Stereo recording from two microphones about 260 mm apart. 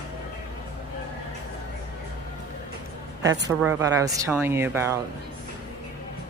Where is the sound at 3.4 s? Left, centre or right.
Centre.